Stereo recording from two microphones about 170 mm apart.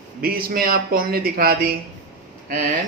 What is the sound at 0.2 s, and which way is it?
Speech, 60° right (ahead or behind).